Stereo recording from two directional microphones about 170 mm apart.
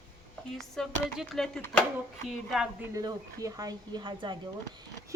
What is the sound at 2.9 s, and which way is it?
A woman's voice, 20° right (ahead or behind).